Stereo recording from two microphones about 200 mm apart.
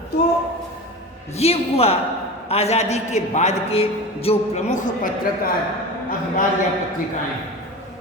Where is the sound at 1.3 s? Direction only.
30° left (ahead or behind).